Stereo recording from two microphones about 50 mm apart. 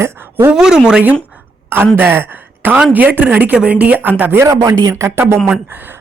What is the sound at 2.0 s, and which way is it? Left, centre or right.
Speech, right.